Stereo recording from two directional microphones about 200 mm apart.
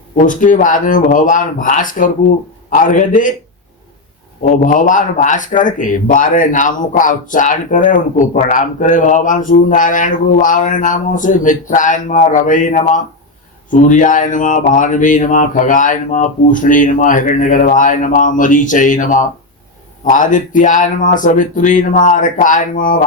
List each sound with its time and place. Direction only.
0.2 s speech: 40° left (ahead or behind)
4.4 s speech: 40° left (ahead or behind)